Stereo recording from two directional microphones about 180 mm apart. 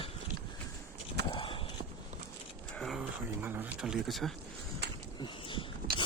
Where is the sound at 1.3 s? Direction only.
30° left (ahead or behind).